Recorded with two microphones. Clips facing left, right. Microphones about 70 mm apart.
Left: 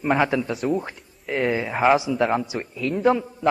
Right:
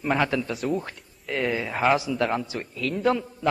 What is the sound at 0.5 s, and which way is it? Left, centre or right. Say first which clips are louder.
A man's voice: left 3 dB; centre.